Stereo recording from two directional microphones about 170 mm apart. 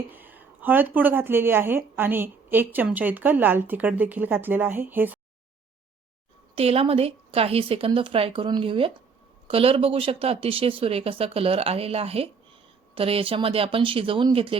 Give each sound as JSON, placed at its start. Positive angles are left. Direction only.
{"t": 0.1, "sound": "speech", "side_deg": -10}
{"t": 6.6, "sound": "speech", "side_deg": -35}